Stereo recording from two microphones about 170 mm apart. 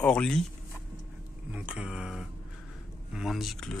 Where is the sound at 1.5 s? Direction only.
5° right (ahead or behind).